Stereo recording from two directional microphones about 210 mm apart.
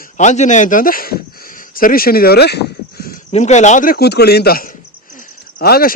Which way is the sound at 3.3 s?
35° left (ahead or behind).